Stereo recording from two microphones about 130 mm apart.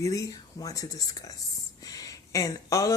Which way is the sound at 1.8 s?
30° left (ahead or behind).